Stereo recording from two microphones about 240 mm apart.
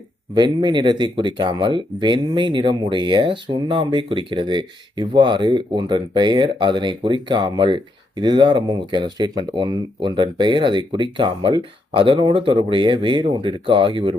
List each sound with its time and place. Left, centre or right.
0.3 s speech: centre